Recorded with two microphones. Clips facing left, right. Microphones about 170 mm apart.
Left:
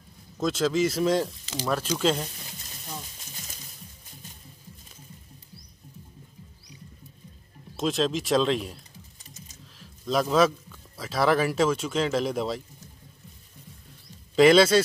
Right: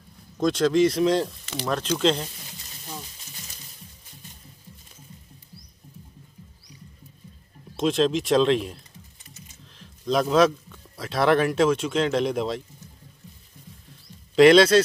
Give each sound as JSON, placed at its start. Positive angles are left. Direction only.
{"t": 0.4, "sound": "speech", "side_deg": 5}
{"t": 1.4, "sound": "a sound", "side_deg": -60}
{"t": 1.7, "sound": "speech", "side_deg": 5}
{"t": 7.7, "sound": "a man's voice", "side_deg": 0}
{"t": 14.3, "sound": "speech", "side_deg": 5}